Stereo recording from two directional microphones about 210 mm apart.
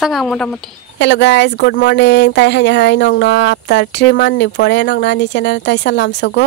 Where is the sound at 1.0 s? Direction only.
55° left (ahead or behind).